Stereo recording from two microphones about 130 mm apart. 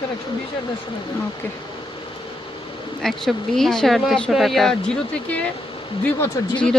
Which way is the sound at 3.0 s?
5° left (ahead or behind).